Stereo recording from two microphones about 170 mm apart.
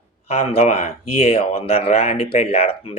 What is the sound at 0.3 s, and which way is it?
Speech, 35° left (ahead or behind).